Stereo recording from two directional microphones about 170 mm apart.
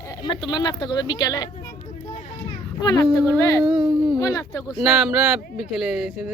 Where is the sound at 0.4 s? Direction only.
25° left (ahead or behind).